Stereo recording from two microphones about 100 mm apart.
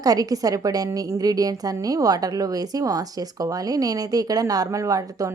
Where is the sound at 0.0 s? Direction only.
35° right (ahead or behind).